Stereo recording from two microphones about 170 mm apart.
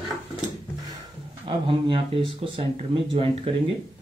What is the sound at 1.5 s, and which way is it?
Speech, 30° right (ahead or behind).